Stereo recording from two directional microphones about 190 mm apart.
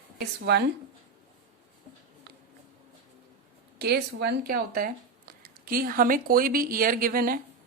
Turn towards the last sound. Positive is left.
turn(degrees=-50)  # may be behind; listen again after turning